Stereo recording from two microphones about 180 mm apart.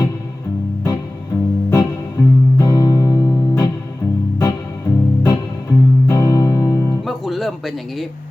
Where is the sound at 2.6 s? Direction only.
20° left (ahead or behind).